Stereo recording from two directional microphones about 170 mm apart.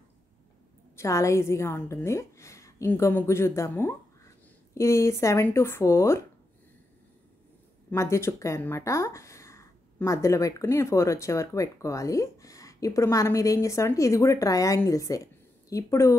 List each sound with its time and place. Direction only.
0.9 s speech: 15° left (ahead or behind)
7.9 s speech: 15° left (ahead or behind)